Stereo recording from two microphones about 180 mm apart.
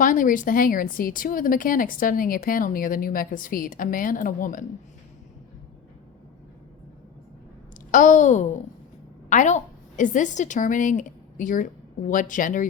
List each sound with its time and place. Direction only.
0.0 s speech: 50° left (ahead or behind)
7.9 s a woman's voice: 45° left (ahead or behind)